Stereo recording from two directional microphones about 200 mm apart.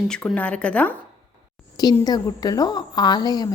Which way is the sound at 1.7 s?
20° left (ahead or behind).